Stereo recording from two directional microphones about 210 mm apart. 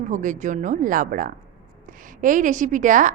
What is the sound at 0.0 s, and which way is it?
A woman's voice, 35° right (ahead or behind).